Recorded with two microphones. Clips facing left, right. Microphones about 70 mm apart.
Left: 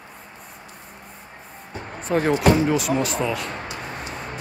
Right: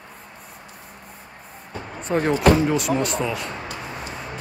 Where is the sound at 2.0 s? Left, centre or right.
Centre.